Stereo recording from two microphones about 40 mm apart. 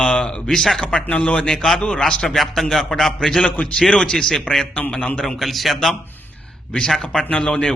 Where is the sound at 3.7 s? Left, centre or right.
Left; by 5.8 s centre.